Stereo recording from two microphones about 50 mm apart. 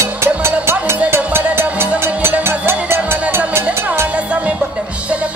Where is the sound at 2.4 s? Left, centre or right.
Right.